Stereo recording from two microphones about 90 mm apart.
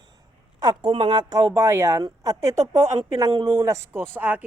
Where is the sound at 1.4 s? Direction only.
30° right (ahead or behind).